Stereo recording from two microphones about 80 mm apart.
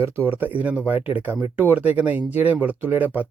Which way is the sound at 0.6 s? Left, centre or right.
Centre.